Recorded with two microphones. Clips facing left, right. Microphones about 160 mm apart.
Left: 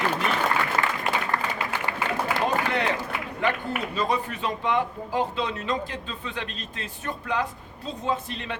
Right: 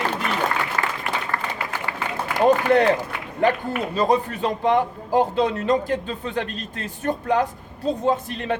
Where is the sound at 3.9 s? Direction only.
40° right (ahead or behind).